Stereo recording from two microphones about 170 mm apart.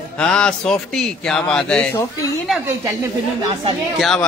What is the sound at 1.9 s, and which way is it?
Speech, 20° left (ahead or behind).